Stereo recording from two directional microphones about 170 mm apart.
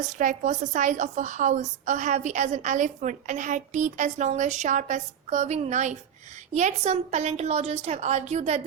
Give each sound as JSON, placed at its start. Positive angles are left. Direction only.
{"t": 0.0, "sound": "a woman's voice", "side_deg": -45}